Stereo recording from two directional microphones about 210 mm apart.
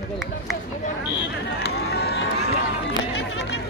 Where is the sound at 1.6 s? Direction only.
50° left (ahead or behind).